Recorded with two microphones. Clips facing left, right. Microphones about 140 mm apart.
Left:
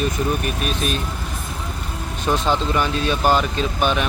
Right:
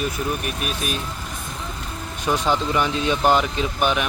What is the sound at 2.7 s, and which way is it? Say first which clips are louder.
Speech: even; 20° right (ahead or behind).